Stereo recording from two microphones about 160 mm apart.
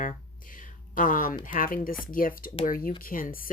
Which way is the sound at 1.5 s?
60° left (ahead or behind).